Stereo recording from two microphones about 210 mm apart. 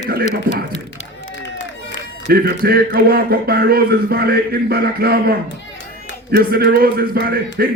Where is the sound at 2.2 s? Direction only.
45° right (ahead or behind).